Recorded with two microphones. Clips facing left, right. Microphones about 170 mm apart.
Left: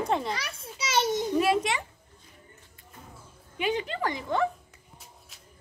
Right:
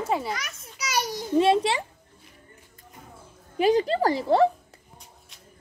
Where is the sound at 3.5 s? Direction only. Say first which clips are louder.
Right 9 dB; 35° right (ahead or behind).